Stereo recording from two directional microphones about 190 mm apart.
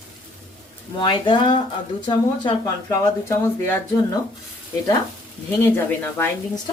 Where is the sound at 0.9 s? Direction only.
25° left (ahead or behind).